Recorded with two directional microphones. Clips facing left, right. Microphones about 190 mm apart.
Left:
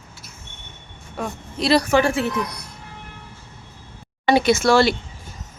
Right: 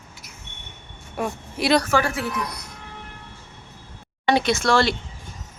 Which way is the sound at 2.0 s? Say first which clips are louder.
Left 5 dB; 30° left (ahead or behind).